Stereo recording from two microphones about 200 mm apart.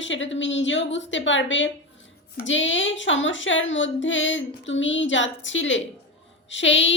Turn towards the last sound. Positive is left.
turn(degrees=65)  # may be behind; listen again after turning